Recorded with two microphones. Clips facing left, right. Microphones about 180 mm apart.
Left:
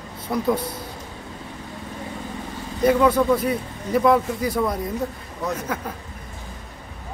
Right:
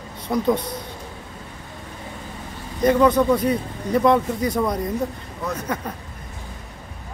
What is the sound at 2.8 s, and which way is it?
Speech, 5° left (ahead or behind).